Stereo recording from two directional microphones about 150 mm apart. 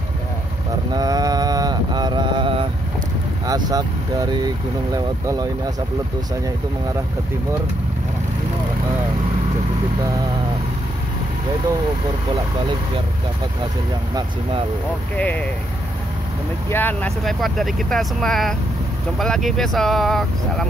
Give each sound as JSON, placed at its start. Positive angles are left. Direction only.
{"t": 0.9, "sound": "mantra", "side_deg": -25}
{"t": 3.4, "sound": "speech", "side_deg": -25}
{"t": 12.3, "sound": "speech", "side_deg": -35}
{"t": 15.1, "sound": "speech", "side_deg": 10}
{"t": 16.6, "sound": "speech", "side_deg": 15}
{"t": 17.2, "sound": "speech", "side_deg": 0}